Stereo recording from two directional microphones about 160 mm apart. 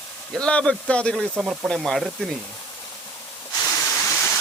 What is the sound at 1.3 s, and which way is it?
Speech, 10° right (ahead or behind).